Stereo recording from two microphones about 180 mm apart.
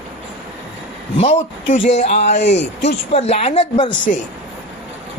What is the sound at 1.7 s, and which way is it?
Speech, 40° left (ahead or behind).